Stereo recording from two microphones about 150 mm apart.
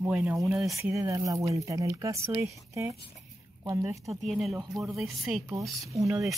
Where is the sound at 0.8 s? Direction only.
20° right (ahead or behind).